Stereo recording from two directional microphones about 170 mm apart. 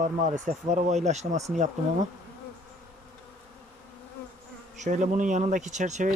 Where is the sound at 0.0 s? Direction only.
45° right (ahead or behind).